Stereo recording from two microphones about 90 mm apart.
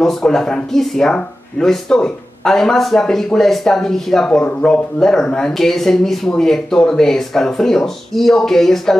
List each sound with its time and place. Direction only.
0.0 s speech: 5° left (ahead or behind)